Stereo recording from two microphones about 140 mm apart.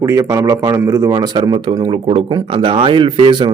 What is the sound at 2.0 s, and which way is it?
Speech, 40° right (ahead or behind).